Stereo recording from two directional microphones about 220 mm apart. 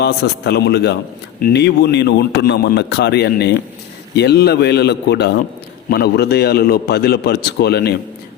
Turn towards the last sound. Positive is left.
turn(degrees=45)  # may be behind; listen again after turning